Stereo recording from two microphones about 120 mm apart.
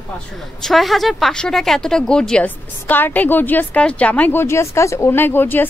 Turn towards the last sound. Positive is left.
turn(degrees=15)  # may be behind; listen again after turning